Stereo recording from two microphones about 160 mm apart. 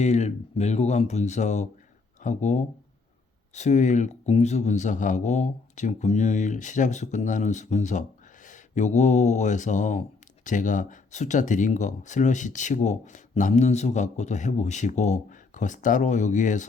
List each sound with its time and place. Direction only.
0.0 s speech: 45° left (ahead or behind)